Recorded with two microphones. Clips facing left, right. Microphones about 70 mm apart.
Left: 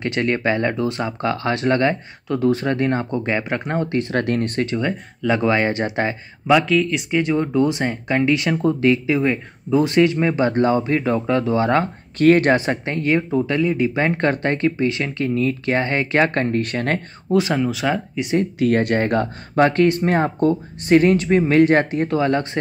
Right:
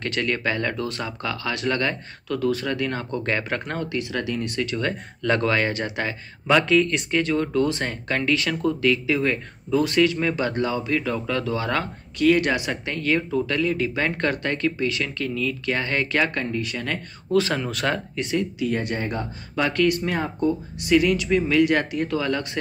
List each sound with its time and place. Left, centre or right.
0.0 s speech: left
4.7 s speech: centre
5.5 s speech: left
6.4 s speech: centre
7.1 s speech: centre
12.2 s speech: left
16.5 s speech: left
17.3 s speech: centre
17.6 s speech: centre
18.6 s speech: left
19.5 s speech: left